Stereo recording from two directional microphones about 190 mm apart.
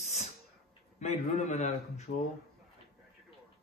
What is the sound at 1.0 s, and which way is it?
Speech, 35° left (ahead or behind).